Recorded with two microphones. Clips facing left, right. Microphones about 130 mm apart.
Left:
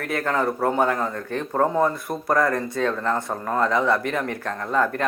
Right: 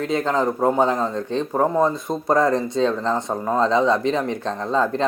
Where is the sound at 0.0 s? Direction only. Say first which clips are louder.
Right 3 dB; 20° right (ahead or behind).